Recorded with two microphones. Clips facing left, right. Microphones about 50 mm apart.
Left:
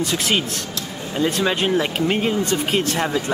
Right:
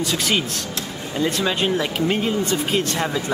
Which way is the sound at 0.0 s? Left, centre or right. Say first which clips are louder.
Left 1 dB; left.